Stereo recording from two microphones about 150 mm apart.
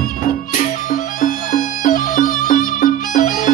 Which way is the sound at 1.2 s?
65° left (ahead or behind).